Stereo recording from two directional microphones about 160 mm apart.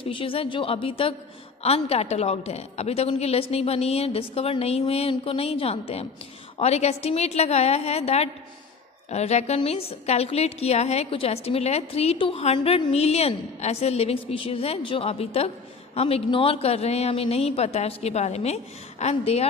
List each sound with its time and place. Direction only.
0.0 s a woman's voice: 35° left (ahead or behind)